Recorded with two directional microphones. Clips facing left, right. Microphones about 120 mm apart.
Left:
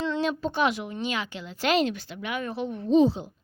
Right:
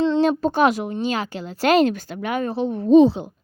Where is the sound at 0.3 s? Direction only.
45° right (ahead or behind).